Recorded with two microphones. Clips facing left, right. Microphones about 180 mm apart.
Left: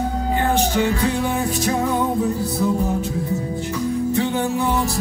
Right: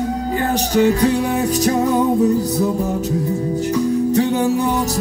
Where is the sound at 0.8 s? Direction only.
40° right (ahead or behind).